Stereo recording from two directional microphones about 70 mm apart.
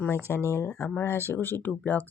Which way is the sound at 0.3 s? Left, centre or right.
Left.